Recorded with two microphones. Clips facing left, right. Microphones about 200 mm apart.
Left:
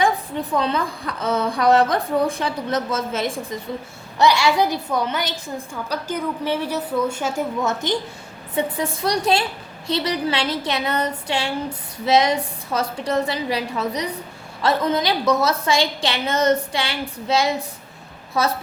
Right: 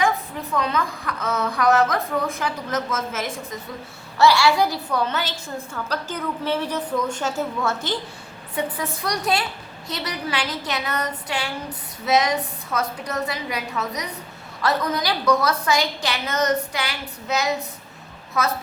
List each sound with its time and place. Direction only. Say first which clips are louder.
0.0 s a woman's voice: left 2 dB; 30° left (ahead or behind)
4.2 s a woman's voice: even; 20° left (ahead or behind)
8.5 s a woman's voice: left 4 dB; 30° left (ahead or behind)